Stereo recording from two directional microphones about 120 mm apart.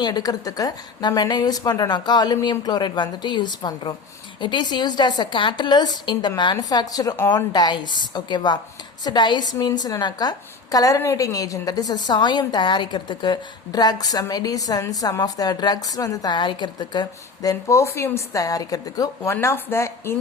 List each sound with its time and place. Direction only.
0.0 s a woman's voice: 30° left (ahead or behind)